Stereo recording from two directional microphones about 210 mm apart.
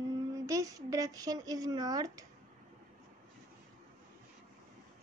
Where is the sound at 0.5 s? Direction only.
15° right (ahead or behind).